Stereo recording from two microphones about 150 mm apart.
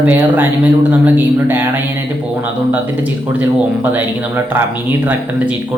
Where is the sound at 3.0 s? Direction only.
10° right (ahead or behind).